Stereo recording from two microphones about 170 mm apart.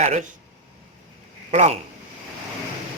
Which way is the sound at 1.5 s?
40° right (ahead or behind).